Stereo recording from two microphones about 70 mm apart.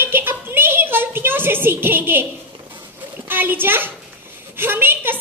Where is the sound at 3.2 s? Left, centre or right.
Right.